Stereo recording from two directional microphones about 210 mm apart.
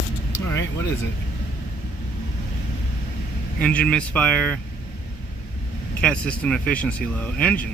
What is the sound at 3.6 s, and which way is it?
Speech, 5° left (ahead or behind).